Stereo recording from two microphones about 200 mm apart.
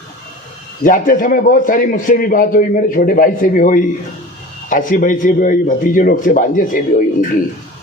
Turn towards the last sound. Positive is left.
turn(degrees=40)  # may be behind; listen again after turning